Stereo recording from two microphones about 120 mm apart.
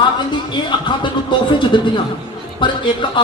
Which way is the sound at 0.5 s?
40° left (ahead or behind).